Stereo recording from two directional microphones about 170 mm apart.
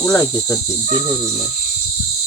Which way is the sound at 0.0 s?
15° left (ahead or behind).